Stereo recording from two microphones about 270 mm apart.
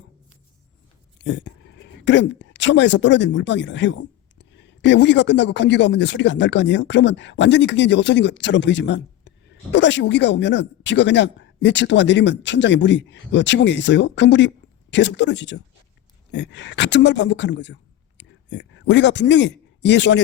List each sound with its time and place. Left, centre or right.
1.2 s a man's voice: left